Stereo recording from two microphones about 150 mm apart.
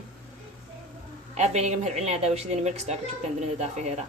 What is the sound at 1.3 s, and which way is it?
A woman's voice, 50° right (ahead or behind).